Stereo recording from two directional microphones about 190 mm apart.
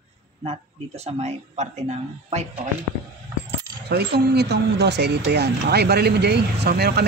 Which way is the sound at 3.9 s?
60° right (ahead or behind).